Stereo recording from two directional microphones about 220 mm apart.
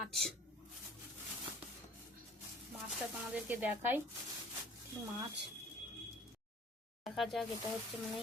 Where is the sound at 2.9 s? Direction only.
5° right (ahead or behind).